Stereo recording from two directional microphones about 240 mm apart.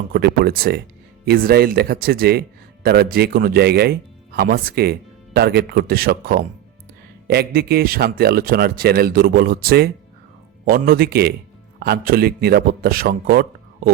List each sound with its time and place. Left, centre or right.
0.1 s speech: right